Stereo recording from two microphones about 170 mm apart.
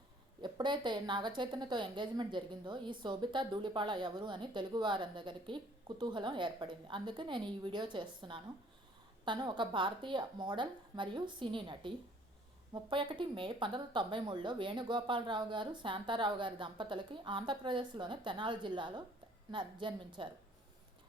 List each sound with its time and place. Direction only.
0.4 s speech: 25° right (ahead or behind)